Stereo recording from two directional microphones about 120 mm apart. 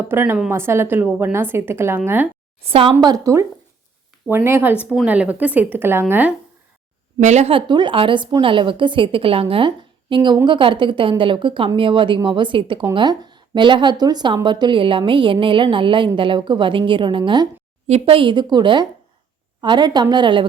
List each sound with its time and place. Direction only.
0.1 s a woman's voice: 20° right (ahead or behind)
2.6 s a woman's voice: 50° right (ahead or behind)
3.0 s a woman's voice: 30° right (ahead or behind)
7.2 s speech: 75° right (ahead or behind)
7.5 s a woman's voice: 40° right (ahead or behind)
17.8 s a woman's voice: 55° right (ahead or behind); by 20.5 s 40° right (ahead or behind)